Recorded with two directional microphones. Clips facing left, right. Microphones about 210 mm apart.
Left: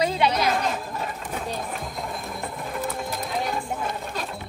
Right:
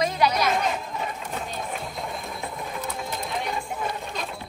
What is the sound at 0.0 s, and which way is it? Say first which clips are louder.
Chatter: left 1 dB; 30° left (ahead or behind).